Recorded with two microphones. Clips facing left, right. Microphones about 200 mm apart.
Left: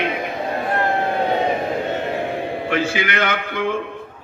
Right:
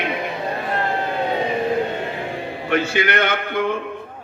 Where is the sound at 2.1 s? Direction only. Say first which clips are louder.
Left 4 dB; 55° left (ahead or behind).